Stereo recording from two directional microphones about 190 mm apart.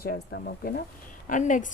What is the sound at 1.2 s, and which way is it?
Speech, 40° left (ahead or behind).